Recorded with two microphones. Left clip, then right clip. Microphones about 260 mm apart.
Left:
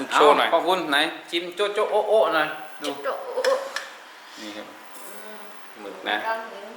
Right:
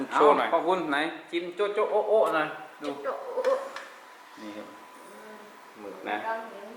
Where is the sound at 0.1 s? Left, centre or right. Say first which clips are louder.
Left 5 dB; centre.